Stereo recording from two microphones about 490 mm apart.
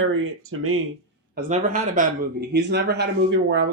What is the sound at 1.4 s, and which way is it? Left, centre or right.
A man's voice, centre.